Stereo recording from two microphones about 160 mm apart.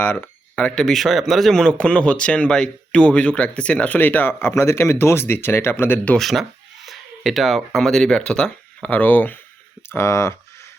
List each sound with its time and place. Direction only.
0.0 s speech: 10° left (ahead or behind)
6.1 s speech: centre (ahead or behind); by 10.3 s 15° left (ahead or behind)